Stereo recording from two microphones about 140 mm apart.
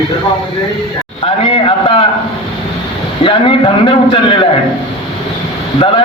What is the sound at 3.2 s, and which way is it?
A man's voice, 40° left (ahead or behind).